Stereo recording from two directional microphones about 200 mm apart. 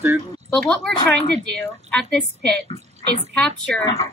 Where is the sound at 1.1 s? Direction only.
60° right (ahead or behind).